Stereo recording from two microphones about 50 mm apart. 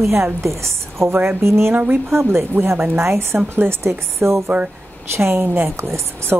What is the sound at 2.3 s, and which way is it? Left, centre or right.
A woman's voice, right.